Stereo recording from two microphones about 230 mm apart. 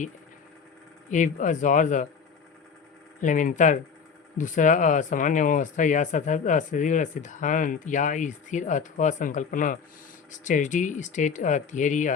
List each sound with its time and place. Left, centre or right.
1.1 s speech: left
3.2 s speech: left